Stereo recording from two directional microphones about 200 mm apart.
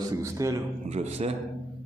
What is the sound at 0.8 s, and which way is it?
Speech, 35° right (ahead or behind).